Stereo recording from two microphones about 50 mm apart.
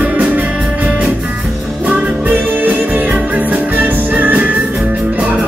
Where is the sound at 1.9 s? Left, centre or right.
Right.